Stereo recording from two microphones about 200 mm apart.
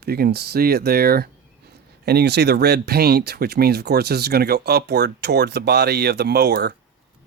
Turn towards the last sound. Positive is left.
turn(degrees=-55)  # may be behind; listen again after turning